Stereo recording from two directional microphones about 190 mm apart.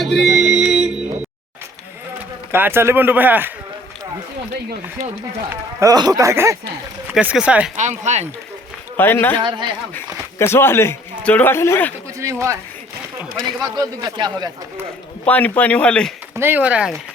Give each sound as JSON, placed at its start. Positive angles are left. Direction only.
{"t": 0.0, "sound": "music", "side_deg": 0}
{"t": 2.5, "sound": "speech", "side_deg": -10}
{"t": 5.5, "sound": "speech", "side_deg": -20}
{"t": 7.8, "sound": "speech", "side_deg": -40}
{"t": 9.0, "sound": "speech", "side_deg": 10}
{"t": 9.4, "sound": "speech", "side_deg": -25}
{"t": 10.3, "sound": "speech", "side_deg": 15}
{"t": 12.2, "sound": "speech", "side_deg": -15}
{"t": 13.6, "sound": "speech", "side_deg": -20}
{"t": 15.3, "sound": "speech", "side_deg": 10}
{"t": 16.3, "sound": "speech", "side_deg": -10}